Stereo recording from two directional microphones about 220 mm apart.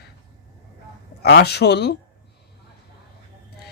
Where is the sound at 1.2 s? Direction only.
50° left (ahead or behind).